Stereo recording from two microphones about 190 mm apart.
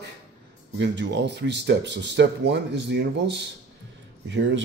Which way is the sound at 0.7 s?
65° right (ahead or behind).